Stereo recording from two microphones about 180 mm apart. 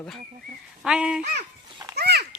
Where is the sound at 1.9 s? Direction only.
65° right (ahead or behind).